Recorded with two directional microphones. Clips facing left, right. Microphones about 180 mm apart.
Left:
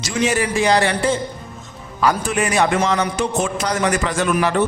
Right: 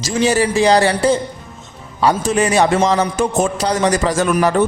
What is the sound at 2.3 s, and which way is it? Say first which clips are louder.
Speech: right 4 dB; 30° right (ahead or behind).